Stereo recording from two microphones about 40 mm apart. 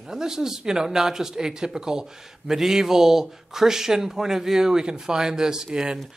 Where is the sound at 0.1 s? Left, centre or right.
Centre.